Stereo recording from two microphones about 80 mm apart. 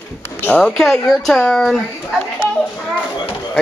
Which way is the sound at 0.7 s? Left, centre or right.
Centre.